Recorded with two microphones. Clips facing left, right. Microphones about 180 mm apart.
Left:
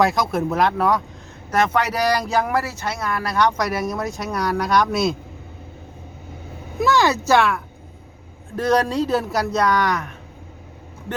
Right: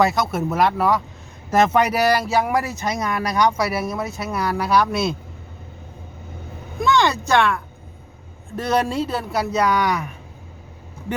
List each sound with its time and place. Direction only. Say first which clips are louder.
0.0 s speech: even; centre (ahead or behind)
1.5 s speech: right 3 dB; 20° right (ahead or behind)
1.9 s speech: right 2 dB; 5° right (ahead or behind)
6.7 s speech: left 1 dB; 5° left (ahead or behind)